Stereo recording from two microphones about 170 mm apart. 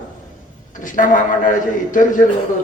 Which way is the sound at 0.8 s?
50° left (ahead or behind).